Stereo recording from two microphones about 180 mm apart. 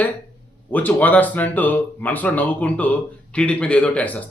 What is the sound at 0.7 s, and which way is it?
Speech, 10° left (ahead or behind).